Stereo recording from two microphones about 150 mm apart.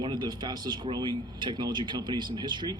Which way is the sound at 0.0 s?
30° right (ahead or behind).